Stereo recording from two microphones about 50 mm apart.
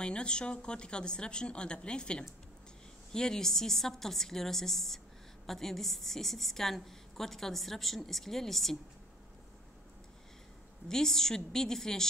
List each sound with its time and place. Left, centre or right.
0.0 s a woman's voice: centre
10.9 s a woman's voice: centre